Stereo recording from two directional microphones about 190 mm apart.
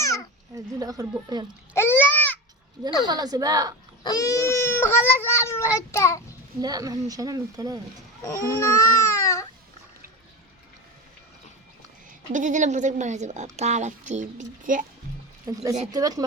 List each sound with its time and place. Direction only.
0.0 s a sound: 15° left (ahead or behind)
0.5 s speech: 20° right (ahead or behind)
1.7 s a sound: 10° left (ahead or behind)
3.1 s speech: 20° right (ahead or behind)
4.0 s speech: 20° left (ahead or behind)
6.6 s speech: 20° right (ahead or behind)
8.5 s speech: 15° left (ahead or behind)
12.3 s speech: 40° right (ahead or behind)
15.5 s speech: 20° right (ahead or behind)